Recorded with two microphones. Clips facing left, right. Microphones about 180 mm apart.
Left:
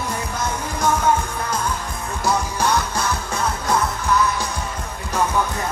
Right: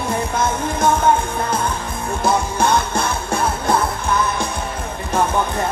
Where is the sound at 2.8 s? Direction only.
25° right (ahead or behind).